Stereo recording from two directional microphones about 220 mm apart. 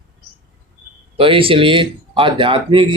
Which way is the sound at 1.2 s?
25° right (ahead or behind).